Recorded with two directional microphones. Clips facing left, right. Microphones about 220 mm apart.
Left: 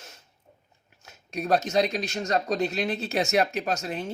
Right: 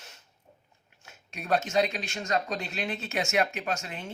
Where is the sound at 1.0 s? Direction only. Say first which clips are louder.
Left 5 dB; 40° left (ahead or behind).